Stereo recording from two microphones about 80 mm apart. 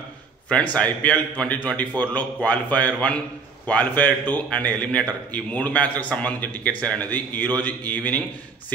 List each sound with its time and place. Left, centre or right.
0.5 s a man's voice: centre